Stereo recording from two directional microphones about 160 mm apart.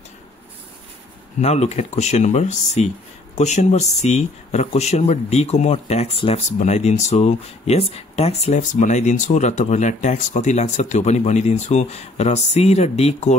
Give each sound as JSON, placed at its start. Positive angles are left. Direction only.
{"t": 1.4, "sound": "speech", "side_deg": 45}